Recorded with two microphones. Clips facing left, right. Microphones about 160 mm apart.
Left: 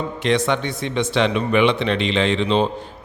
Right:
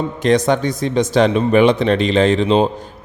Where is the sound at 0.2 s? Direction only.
40° right (ahead or behind).